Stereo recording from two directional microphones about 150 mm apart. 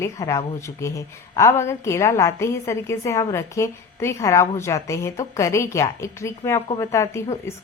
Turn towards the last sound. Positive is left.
turn(degrees=20)  # may be behind; listen again after turning